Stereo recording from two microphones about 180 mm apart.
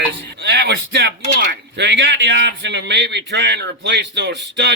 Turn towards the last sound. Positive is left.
turn(degrees=-70)  # may be behind; listen again after turning